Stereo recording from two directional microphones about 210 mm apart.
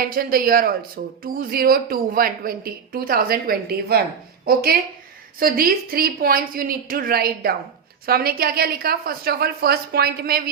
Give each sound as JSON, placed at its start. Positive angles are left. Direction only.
{"t": 0.1, "sound": "a woman's voice", "side_deg": -45}